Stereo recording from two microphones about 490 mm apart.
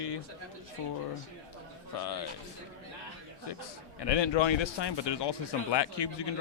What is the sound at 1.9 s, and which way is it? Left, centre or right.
Speech, left.